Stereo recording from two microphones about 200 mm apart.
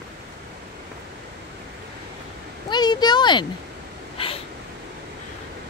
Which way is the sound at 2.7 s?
20° left (ahead or behind).